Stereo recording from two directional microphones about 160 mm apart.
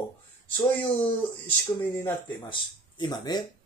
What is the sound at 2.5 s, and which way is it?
Speech, 30° left (ahead or behind).